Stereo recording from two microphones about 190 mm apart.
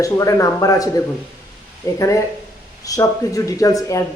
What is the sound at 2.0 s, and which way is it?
Speech, 15° left (ahead or behind).